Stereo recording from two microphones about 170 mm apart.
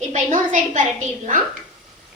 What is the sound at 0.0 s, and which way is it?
A woman's voice, 45° right (ahead or behind).